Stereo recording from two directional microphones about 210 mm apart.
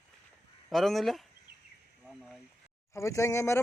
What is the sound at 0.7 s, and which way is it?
Speech, centre (ahead or behind).